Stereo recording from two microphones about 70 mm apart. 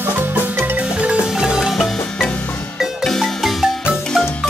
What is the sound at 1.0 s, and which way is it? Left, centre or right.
Marimba, centre.